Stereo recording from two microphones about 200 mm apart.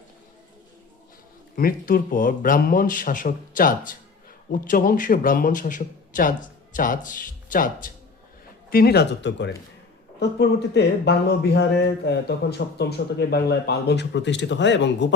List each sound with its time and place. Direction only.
1.5 s a man's voice: 45° left (ahead or behind); by 15.1 s 60° left (ahead or behind)